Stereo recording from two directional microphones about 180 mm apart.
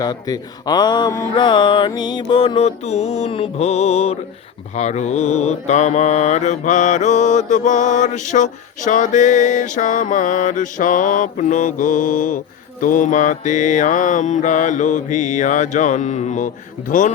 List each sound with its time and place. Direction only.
0.0 s speech: 20° left (ahead or behind)
4.8 s mantra: 40° left (ahead or behind)